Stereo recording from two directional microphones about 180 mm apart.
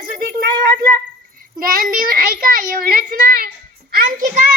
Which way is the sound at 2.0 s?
55° right (ahead or behind).